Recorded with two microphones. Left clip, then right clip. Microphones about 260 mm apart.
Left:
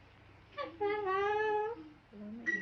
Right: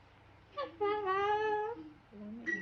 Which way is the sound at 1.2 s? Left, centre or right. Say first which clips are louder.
Even; centre.